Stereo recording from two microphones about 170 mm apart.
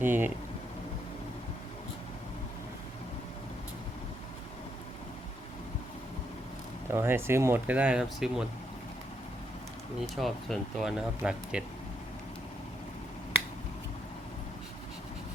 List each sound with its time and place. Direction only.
0.0 s speech: 10° right (ahead or behind)
6.9 s speech: 15° right (ahead or behind)
10.2 s speech: centre (ahead or behind)